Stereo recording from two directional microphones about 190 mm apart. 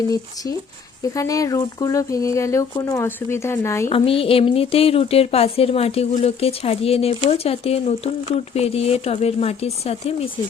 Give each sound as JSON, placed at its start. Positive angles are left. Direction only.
{"t": 1.1, "sound": "speech", "side_deg": 15}
{"t": 3.8, "sound": "a woman's voice", "side_deg": 30}